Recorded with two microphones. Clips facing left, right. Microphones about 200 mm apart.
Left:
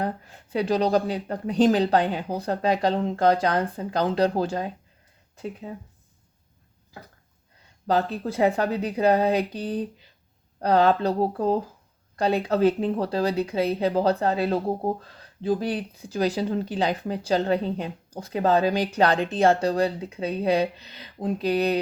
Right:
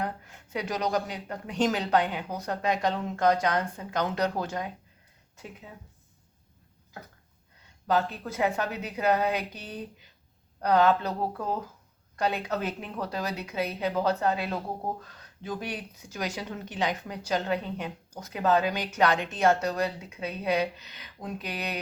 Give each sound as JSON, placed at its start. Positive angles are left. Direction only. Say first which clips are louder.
{"t": 0.0, "sound": "speech", "louder": "left 5 dB", "side_deg": 30}
{"t": 7.9, "sound": "speech", "louder": "left 3 dB", "side_deg": 35}